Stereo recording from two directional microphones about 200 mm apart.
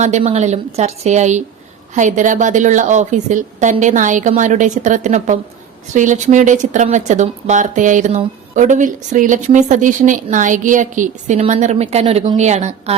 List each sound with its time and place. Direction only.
0.0 s a woman's voice: 35° right (ahead or behind)